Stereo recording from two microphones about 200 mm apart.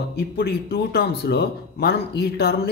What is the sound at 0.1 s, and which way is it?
Speech, 50° left (ahead or behind).